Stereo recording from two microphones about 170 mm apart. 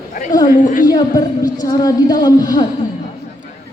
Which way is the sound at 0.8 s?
25° left (ahead or behind).